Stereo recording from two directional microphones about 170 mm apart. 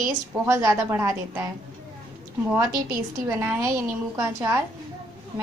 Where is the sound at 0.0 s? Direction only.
15° right (ahead or behind).